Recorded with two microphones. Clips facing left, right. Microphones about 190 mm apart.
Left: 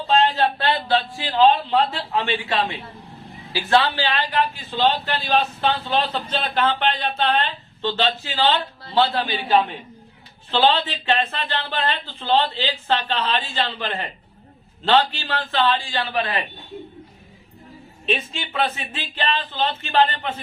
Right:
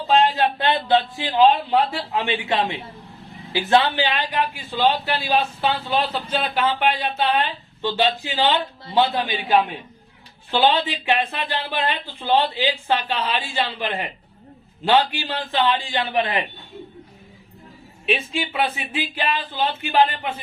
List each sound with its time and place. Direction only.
0.1 s a man's voice: 10° right (ahead or behind)
18.0 s a man's voice: 10° right (ahead or behind)